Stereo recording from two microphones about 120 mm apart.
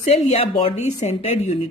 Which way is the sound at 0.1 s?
55° left (ahead or behind).